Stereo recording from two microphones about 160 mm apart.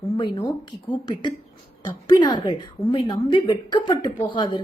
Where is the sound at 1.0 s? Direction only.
30° left (ahead or behind).